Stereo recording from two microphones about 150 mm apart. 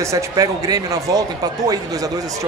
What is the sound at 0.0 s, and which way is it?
Speech, 20° right (ahead or behind).